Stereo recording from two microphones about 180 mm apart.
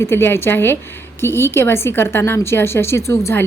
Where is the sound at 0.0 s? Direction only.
15° left (ahead or behind).